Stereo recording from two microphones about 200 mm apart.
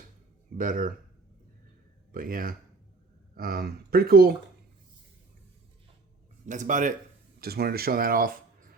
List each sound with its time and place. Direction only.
0.5 s speech: 40° right (ahead or behind)
2.1 s speech: 45° right (ahead or behind)
6.4 s speech: 40° right (ahead or behind)
7.4 s speech: 50° right (ahead or behind)